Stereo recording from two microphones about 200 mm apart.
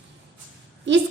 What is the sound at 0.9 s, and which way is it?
Speech, 65° right (ahead or behind).